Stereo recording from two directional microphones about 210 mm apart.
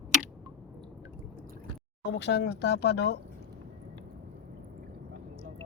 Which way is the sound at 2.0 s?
55° left (ahead or behind).